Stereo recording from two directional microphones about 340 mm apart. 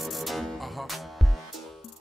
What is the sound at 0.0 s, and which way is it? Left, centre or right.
Music, centre.